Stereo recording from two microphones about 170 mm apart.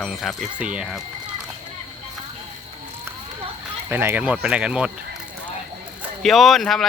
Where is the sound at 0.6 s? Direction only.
5° right (ahead or behind).